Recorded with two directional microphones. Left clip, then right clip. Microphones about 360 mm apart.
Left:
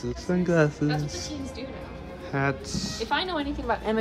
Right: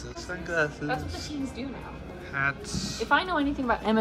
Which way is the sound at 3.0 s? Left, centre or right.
Centre.